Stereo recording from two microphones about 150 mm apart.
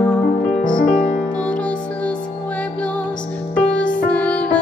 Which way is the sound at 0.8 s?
55° left (ahead or behind).